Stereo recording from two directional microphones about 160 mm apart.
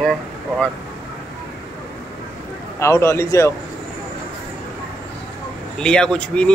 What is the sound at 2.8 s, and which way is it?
Speech, 15° left (ahead or behind).